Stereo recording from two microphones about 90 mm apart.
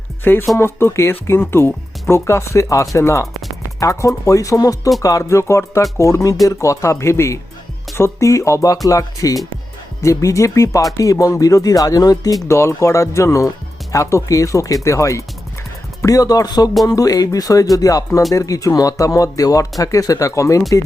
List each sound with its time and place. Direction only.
0.3 s speech: 25° left (ahead or behind)